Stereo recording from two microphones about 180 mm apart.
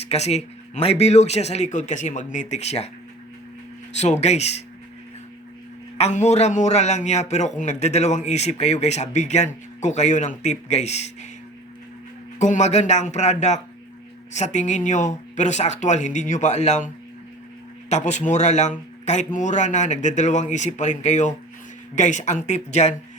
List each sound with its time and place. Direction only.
0.0 s a man's voice: 35° left (ahead or behind)
3.9 s a man's voice: 40° left (ahead or behind)
6.0 s a man's voice: 40° left (ahead or behind)
12.4 s a man's voice: 40° left (ahead or behind)